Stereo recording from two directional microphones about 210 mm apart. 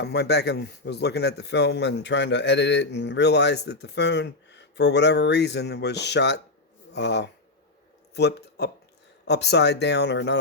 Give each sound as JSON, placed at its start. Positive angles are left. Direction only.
{"t": 0.0, "sound": "speech", "side_deg": 50}